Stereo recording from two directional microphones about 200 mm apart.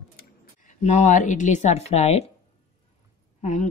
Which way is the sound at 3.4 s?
40° left (ahead or behind).